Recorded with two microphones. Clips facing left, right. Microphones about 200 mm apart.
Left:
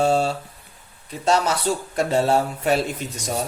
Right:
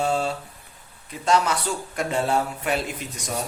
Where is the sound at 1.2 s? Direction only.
30° left (ahead or behind).